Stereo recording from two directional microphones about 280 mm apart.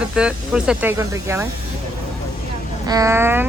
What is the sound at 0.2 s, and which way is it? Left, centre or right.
Speech, centre.